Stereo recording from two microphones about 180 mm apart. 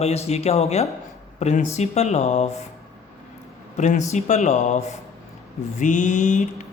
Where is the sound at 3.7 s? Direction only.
40° left (ahead or behind).